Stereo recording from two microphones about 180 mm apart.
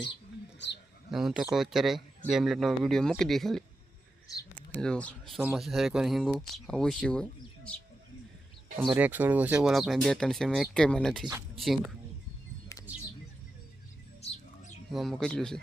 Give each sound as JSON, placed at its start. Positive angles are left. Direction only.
{"t": 1.1, "sound": "speech", "side_deg": -5}
{"t": 4.7, "sound": "speech", "side_deg": 5}
{"t": 8.8, "sound": "speech", "side_deg": -5}
{"t": 14.2, "sound": "a sound", "side_deg": 35}
{"t": 14.9, "sound": "speech", "side_deg": 0}